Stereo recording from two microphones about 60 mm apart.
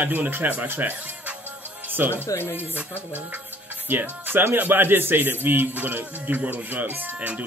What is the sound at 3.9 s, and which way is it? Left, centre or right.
A man's voice, right.